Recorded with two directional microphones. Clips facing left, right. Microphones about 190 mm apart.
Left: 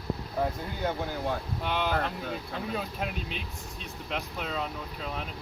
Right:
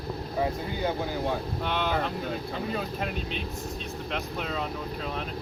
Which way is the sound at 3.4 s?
40° right (ahead or behind).